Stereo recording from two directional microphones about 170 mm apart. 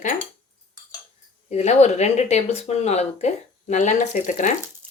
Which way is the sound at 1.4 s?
40° left (ahead or behind).